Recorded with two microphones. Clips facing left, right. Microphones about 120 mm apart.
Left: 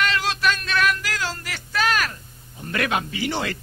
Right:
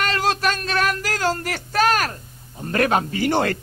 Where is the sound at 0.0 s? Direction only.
45° right (ahead or behind).